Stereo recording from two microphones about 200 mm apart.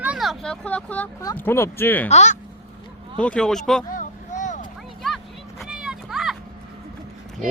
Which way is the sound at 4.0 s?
40° left (ahead or behind).